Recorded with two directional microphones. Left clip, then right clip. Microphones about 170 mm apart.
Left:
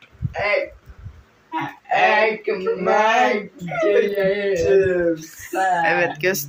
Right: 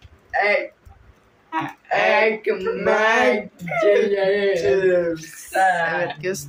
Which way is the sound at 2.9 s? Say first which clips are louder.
Left 1 dB; 15° right (ahead or behind).